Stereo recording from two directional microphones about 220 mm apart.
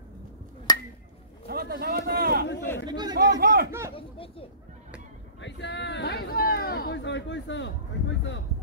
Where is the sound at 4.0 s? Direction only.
25° left (ahead or behind).